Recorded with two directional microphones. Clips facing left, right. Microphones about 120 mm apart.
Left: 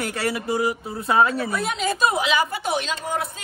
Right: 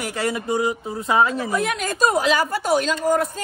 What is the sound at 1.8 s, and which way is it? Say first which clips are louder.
A woman's voice: right 1 dB; 45° right (ahead or behind).